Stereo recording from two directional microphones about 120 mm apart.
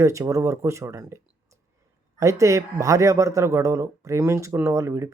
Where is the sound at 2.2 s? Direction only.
25° right (ahead or behind).